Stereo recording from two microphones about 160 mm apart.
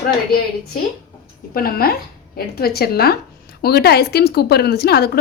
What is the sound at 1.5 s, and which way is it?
Speech, 70° left (ahead or behind).